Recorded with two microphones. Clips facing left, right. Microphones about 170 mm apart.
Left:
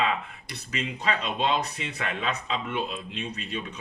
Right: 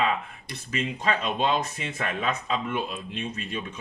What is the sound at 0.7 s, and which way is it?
Speech, 45° right (ahead or behind).